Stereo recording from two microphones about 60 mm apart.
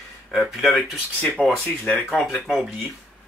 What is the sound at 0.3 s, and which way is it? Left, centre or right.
Speech, centre.